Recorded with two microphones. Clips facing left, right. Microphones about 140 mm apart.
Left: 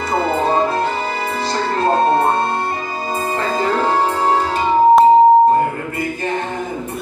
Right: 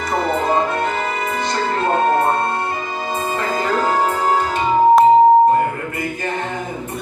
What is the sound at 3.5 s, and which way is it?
Music, centre (ahead or behind).